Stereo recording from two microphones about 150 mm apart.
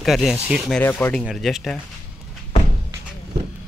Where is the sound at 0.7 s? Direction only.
10° left (ahead or behind).